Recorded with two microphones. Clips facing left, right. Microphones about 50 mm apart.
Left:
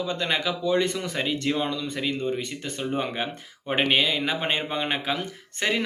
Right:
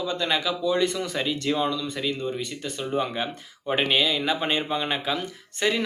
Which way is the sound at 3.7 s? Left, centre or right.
Left.